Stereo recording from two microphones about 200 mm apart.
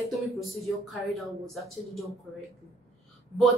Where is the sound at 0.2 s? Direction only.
Centre (ahead or behind).